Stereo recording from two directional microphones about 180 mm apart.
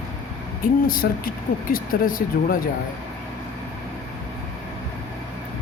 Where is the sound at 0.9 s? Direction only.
50° left (ahead or behind).